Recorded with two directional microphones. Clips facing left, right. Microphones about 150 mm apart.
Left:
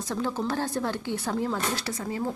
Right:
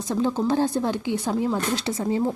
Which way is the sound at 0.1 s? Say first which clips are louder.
Right 7 dB; 15° right (ahead or behind).